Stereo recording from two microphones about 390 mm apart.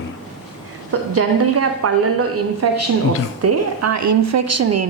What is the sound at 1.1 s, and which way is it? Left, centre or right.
A woman's voice, right.